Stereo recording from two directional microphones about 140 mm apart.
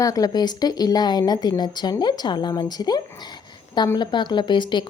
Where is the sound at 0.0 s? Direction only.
25° left (ahead or behind).